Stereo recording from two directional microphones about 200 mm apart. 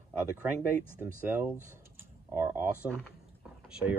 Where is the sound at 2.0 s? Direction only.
10° right (ahead or behind).